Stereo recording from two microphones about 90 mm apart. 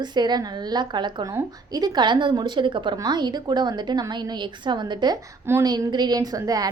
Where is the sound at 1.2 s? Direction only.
45° right (ahead or behind); by 2.9 s 65° right (ahead or behind).